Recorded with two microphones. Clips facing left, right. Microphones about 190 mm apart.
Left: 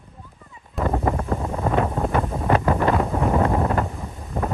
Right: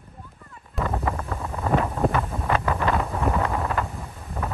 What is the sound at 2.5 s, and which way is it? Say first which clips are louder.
Wind noise: left 4 dB; 30° left (ahead or behind).